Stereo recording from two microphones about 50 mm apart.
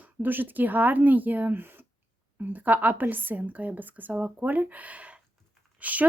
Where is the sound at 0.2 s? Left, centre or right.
Right.